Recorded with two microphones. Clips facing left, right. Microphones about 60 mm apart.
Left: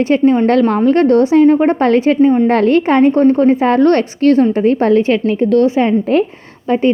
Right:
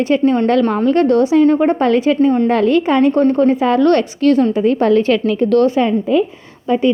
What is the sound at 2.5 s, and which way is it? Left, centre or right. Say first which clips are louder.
Speech: left 2 dB; left.